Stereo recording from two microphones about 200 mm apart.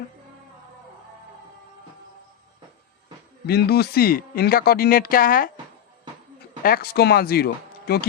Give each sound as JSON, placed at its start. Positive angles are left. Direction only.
{"t": 3.4, "sound": "speech", "side_deg": 50}
{"t": 6.6, "sound": "speech", "side_deg": 45}